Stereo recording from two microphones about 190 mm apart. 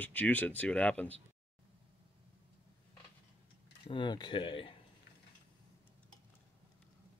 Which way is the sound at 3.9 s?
25° left (ahead or behind).